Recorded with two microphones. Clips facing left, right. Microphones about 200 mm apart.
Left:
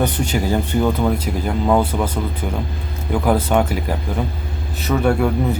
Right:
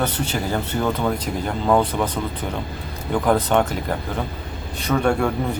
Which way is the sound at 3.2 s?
10° left (ahead or behind).